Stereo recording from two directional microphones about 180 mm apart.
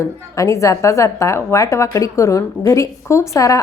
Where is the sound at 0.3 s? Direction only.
15° left (ahead or behind).